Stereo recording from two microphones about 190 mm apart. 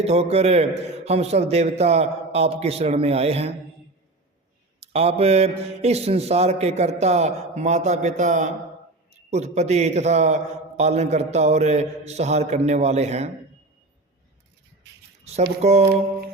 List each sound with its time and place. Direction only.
0.0 s a man's voice: 35° right (ahead or behind)
4.8 s a man's voice: 30° right (ahead or behind)
15.8 s a sound: 60° right (ahead or behind)